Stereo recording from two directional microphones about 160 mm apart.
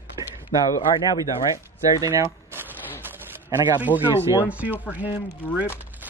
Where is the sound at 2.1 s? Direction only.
15° right (ahead or behind).